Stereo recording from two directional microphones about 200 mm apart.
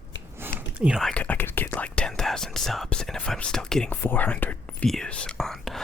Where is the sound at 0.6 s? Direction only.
5° right (ahead or behind).